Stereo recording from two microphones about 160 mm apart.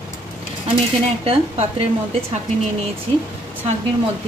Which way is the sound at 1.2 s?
35° right (ahead or behind).